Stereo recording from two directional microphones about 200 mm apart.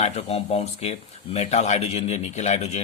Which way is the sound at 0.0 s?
30° left (ahead or behind).